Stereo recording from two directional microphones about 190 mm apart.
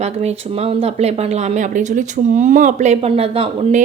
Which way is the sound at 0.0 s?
35° right (ahead or behind).